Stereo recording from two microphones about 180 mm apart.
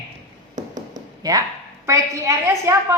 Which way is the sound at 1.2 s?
20° right (ahead or behind).